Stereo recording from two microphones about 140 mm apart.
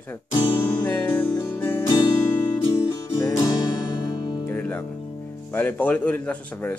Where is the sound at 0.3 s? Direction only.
35° left (ahead or behind).